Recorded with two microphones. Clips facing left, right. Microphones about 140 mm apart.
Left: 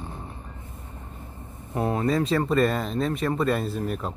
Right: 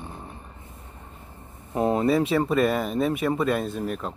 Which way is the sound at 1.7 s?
15° right (ahead or behind).